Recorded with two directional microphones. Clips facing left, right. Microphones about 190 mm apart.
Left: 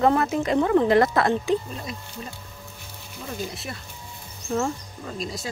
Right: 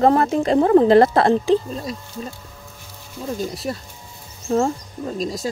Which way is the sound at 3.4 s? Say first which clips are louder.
Right 7 dB; 40° right (ahead or behind).